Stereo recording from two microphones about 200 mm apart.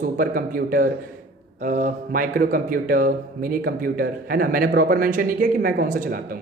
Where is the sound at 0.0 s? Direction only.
45° right (ahead or behind).